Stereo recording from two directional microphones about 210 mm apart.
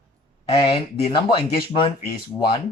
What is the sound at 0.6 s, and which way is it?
Speech, 25° left (ahead or behind).